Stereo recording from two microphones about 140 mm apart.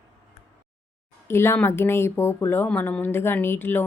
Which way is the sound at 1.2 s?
20° left (ahead or behind).